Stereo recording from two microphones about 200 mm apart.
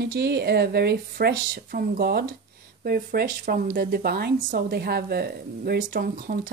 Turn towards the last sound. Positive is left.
turn(degrees=-50)  # may be behind; listen again after turning